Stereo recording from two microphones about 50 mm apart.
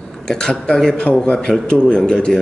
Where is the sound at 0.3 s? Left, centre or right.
Centre.